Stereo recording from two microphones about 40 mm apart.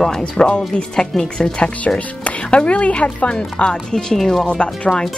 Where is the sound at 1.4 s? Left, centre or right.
Left.